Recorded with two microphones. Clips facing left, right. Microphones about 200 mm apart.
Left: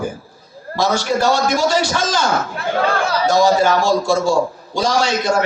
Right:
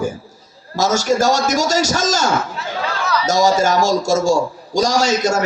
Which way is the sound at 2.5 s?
55° left (ahead or behind).